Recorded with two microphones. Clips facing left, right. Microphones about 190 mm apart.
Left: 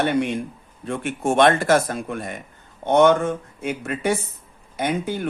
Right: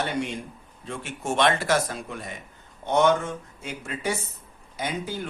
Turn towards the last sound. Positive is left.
turn(degrees=60)  # may be behind; listen again after turning